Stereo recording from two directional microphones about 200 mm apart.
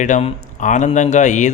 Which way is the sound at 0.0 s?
40° left (ahead or behind).